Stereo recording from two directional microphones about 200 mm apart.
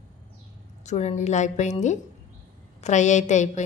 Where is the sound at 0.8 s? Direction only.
35° left (ahead or behind).